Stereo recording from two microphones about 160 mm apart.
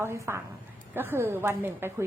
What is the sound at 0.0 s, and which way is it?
A woman's voice, 15° right (ahead or behind).